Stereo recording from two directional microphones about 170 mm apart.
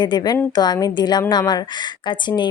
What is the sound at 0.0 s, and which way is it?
A woman's voice, 25° left (ahead or behind).